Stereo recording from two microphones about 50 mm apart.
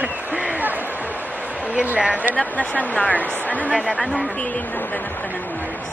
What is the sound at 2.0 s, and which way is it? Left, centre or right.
Speech, right.